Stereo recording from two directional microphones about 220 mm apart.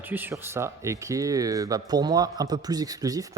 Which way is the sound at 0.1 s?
10° right (ahead or behind).